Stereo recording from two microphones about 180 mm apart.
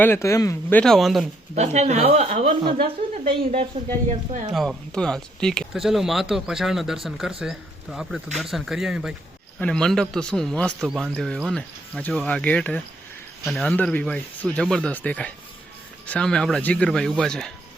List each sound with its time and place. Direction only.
0.0 s speech: 15° left (ahead or behind)
1.5 s speech: 40° right (ahead or behind)
4.5 s speech: centre (ahead or behind)